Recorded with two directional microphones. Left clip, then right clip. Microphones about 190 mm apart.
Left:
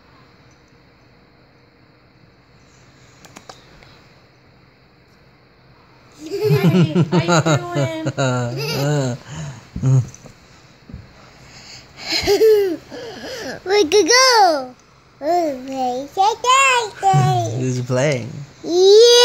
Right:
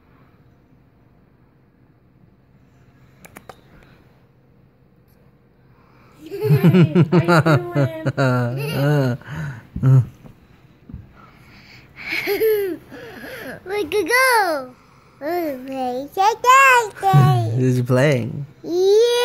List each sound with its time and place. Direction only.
3.2 s a sound: 10° right (ahead or behind)
6.2 s a sound: 50° left (ahead or behind)
6.6 s speech: 5° right (ahead or behind)
11.5 s babbling: 30° left (ahead or behind)
15.1 s a child's voice: 15° left (ahead or behind)
17.6 s speech: 25° right (ahead or behind)
18.6 s babbling: 25° left (ahead or behind)